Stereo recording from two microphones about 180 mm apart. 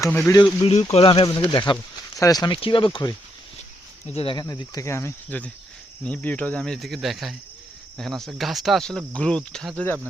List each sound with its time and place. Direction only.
0.3 s speech: 15° left (ahead or behind)
0.6 s speech: 35° left (ahead or behind); by 10.0 s 10° left (ahead or behind)